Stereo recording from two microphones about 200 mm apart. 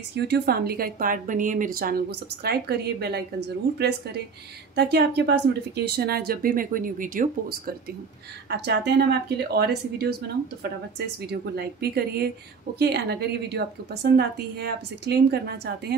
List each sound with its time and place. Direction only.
0.1 s a woman's voice: 55° right (ahead or behind)
8.5 s a woman's voice: 55° right (ahead or behind)